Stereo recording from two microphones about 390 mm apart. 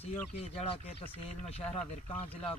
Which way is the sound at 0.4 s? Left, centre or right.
Centre.